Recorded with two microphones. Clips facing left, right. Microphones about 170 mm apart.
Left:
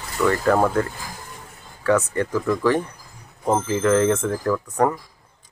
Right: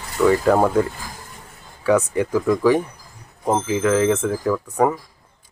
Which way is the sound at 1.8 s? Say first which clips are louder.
Right 2 dB; 10° right (ahead or behind).